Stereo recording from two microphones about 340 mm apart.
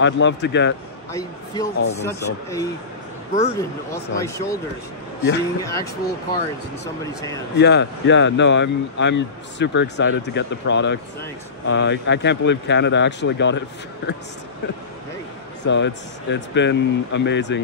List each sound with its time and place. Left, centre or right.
0.0 s speech: left
1.1 s speech: centre
4.2 s speech: centre
6.0 s speech: left
15.6 s speech: left